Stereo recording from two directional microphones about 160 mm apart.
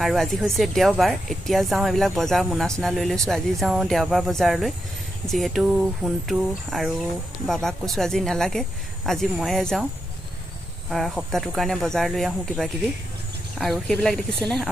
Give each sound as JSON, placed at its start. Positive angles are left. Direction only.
{"t": 0.0, "sound": "speech", "side_deg": 0}
{"t": 10.9, "sound": "speech", "side_deg": 0}